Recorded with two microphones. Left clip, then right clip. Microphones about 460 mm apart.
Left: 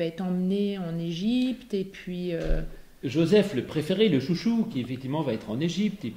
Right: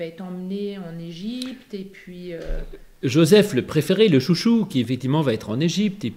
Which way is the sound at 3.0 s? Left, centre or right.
Right.